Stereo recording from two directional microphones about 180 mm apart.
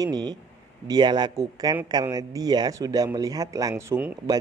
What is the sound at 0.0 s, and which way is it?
Speech, 20° right (ahead or behind).